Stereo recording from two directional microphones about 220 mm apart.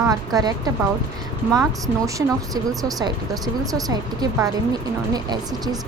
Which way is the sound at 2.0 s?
15° right (ahead or behind).